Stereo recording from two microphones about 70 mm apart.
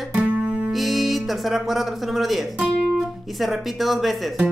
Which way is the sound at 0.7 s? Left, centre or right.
Centre.